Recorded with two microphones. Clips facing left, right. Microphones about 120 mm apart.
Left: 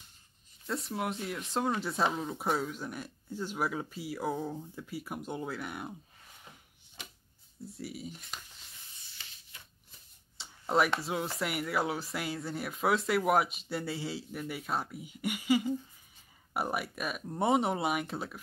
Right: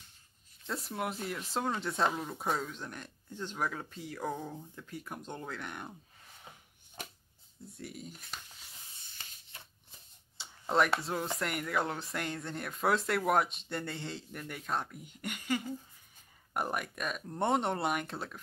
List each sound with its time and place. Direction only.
0.7 s speech: centre (ahead or behind)
7.7 s speech: 5° left (ahead or behind)
9.1 s spray: 45° right (ahead or behind)
10.3 s speech: centre (ahead or behind)